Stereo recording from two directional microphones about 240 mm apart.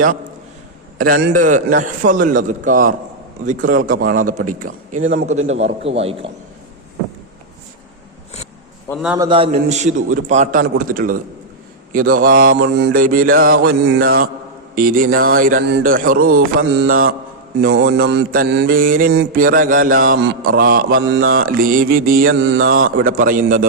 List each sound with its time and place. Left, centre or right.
0.9 s speech: right
5.5 s a man's voice: right
8.9 s a man's voice: centre
9.1 s speech: centre; by 22.3 s right
22.3 s speech: right